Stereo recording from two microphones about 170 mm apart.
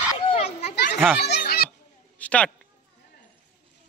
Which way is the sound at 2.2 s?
5° left (ahead or behind).